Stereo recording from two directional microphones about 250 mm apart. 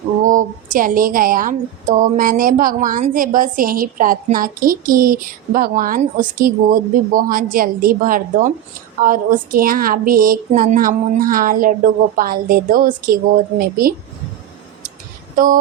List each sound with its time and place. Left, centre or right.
0.2 s a woman's voice: right
15.4 s a woman's voice: right